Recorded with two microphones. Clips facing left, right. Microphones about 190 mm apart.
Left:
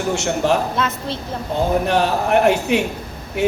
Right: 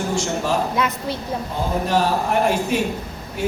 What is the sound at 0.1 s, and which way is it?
Speech, 70° left (ahead or behind).